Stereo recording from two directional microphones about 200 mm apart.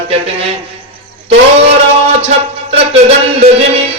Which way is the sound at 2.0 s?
30° right (ahead or behind).